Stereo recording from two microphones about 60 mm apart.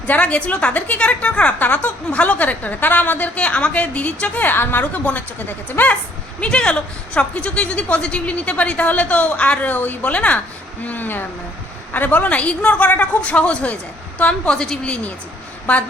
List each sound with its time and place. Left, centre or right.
0.1 s speech: left
6.4 s speech: centre